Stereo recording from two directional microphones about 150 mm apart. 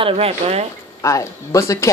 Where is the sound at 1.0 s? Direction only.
20° left (ahead or behind).